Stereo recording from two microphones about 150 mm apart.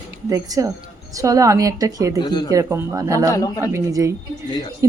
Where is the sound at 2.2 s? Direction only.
30° left (ahead or behind).